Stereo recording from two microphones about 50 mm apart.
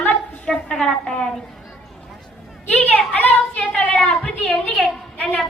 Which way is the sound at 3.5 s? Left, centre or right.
Left.